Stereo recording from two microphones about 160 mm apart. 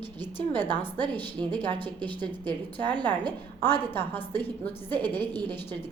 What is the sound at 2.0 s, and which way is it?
A woman's voice, 10° left (ahead or behind).